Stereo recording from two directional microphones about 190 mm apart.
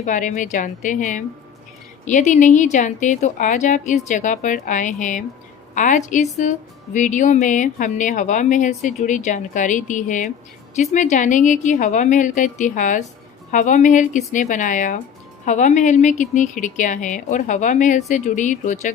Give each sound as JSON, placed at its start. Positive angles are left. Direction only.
{"t": 0.0, "sound": "a woman's voice", "side_deg": 40}